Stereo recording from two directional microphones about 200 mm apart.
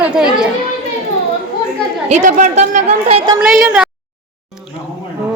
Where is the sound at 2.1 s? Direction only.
40° right (ahead or behind).